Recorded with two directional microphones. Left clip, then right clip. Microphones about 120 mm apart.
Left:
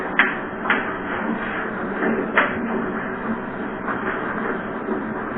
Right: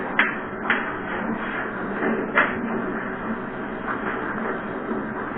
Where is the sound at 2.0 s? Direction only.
30° right (ahead or behind).